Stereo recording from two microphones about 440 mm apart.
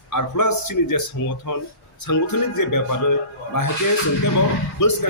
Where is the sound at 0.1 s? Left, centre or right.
Left.